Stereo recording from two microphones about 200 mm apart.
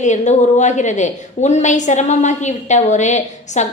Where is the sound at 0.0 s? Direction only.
35° left (ahead or behind).